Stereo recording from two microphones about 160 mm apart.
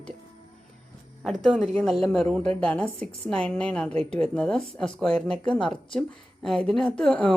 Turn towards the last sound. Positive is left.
turn(degrees=5)  # may be behind; listen again after turning